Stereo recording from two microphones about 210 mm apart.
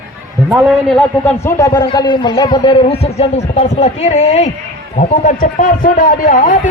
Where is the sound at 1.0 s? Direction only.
10° left (ahead or behind).